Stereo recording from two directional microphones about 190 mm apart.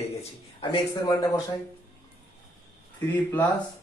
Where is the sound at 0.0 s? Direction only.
30° left (ahead or behind).